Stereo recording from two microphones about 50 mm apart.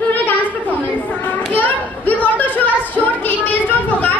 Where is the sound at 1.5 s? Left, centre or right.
Left.